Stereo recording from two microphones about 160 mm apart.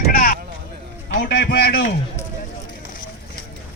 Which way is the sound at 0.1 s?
65° left (ahead or behind).